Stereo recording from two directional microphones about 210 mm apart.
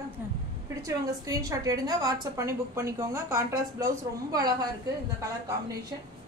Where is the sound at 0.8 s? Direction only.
15° right (ahead or behind).